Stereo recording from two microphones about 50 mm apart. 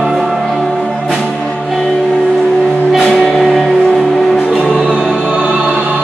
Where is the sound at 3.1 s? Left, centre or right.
Centre.